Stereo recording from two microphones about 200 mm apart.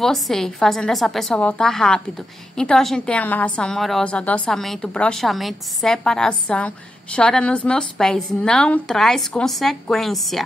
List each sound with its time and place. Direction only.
0.0 s a woman's voice: centre (ahead or behind)